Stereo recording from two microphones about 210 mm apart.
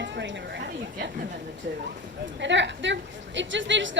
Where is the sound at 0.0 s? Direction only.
55° right (ahead or behind).